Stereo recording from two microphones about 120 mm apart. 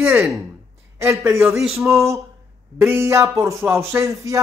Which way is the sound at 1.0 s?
25° right (ahead or behind).